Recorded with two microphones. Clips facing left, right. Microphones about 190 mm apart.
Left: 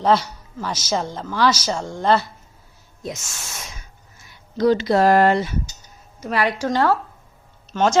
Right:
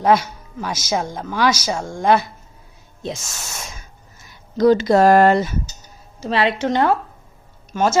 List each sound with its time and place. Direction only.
0.0 s speech: 15° right (ahead or behind)
3.0 s speech: 30° right (ahead or behind)
6.1 s a woman's voice: 25° right (ahead or behind); by 7.9 s 10° right (ahead or behind)